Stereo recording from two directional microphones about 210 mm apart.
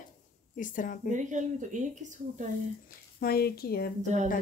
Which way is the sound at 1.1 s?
35° right (ahead or behind).